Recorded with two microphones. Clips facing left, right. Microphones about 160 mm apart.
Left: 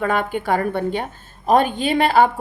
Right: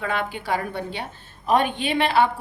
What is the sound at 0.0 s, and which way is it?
A woman's voice, 50° left (ahead or behind).